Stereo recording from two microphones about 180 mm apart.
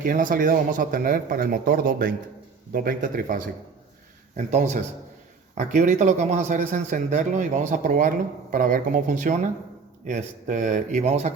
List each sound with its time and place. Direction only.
0.0 s a man's voice: 50° right (ahead or behind)